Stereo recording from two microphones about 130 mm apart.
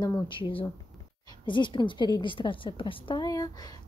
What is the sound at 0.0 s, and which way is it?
A woman's voice, 35° left (ahead or behind).